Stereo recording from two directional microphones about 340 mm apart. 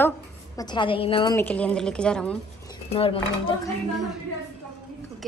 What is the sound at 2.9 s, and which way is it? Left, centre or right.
Speech, centre.